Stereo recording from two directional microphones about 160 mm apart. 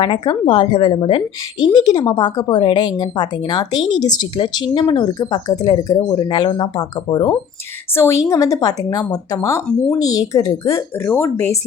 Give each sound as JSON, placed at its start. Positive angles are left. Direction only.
{"t": 0.0, "sound": "a woman's voice", "side_deg": 30}